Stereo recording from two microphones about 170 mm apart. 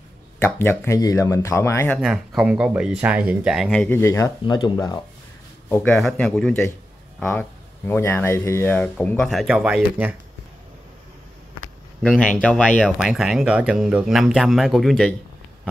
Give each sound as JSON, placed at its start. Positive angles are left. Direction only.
{"t": 0.4, "sound": "speech", "side_deg": 15}
{"t": 1.9, "sound": "speech", "side_deg": 0}
{"t": 4.0, "sound": "speech", "side_deg": 20}
{"t": 5.7, "sound": "speech", "side_deg": 5}
{"t": 12.0, "sound": "speech", "side_deg": 5}